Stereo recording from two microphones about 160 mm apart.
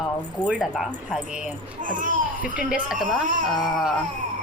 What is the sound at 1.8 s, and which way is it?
Speech, 55° right (ahead or behind).